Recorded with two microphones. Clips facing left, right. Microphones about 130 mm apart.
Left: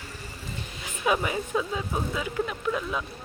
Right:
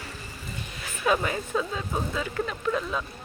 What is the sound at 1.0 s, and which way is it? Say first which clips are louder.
Speech: right 1 dB; 10° left (ahead or behind).